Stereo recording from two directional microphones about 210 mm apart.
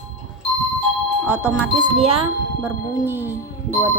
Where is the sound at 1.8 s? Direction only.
25° right (ahead or behind).